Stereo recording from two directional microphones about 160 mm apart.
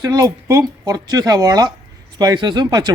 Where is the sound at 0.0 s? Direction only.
25° right (ahead or behind).